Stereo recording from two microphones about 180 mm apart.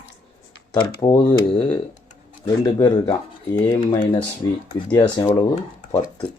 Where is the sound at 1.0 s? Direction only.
20° left (ahead or behind).